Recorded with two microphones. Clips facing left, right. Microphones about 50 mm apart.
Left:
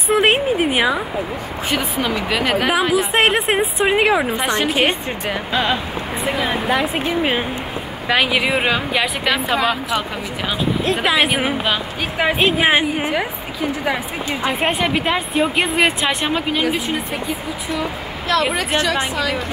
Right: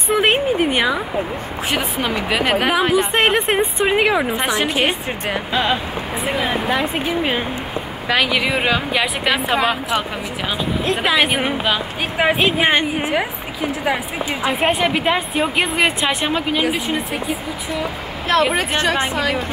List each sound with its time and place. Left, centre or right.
0.1 s speech: centre
1.7 s a woman's voice: right
2.9 s a woman's voice: centre
9.2 s a woman's voice: centre
10.9 s a woman's voice: centre
13.1 s a woman's voice: centre
14.4 s a woman's voice: centre
18.3 s speech: right